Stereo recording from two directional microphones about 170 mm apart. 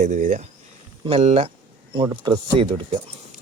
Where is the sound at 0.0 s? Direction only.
50° right (ahead or behind).